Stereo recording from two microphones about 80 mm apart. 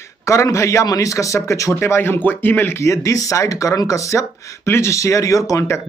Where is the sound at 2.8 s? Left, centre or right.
Left.